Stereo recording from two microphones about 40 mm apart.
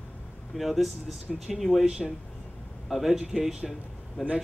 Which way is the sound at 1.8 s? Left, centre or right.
Right.